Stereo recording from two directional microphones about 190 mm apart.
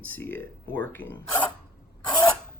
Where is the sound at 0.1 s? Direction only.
10° left (ahead or behind).